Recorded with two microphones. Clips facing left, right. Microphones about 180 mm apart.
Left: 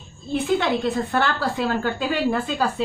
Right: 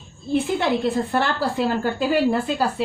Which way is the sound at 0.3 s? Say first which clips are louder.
Right 1 dB; 30° right (ahead or behind).